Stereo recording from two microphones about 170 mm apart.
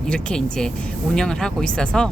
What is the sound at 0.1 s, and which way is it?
Speech, 5° left (ahead or behind).